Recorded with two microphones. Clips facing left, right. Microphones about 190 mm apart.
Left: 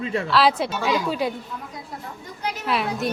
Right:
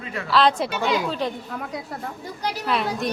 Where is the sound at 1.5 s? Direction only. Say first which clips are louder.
Right 4 dB; 70° right (ahead or behind).